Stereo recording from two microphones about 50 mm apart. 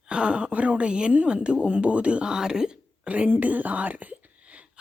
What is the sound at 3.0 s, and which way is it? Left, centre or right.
Speech, right.